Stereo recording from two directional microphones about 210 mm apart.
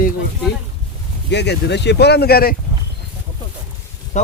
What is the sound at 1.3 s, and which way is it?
Speech, 55° left (ahead or behind).